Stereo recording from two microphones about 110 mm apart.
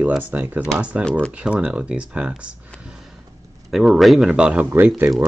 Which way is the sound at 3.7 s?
Centre (ahead or behind).